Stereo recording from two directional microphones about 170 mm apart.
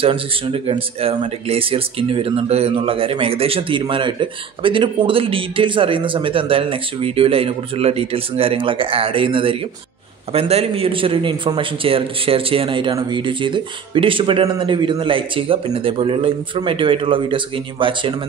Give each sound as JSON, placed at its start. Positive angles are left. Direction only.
{"t": 0.0, "sound": "speech", "side_deg": -30}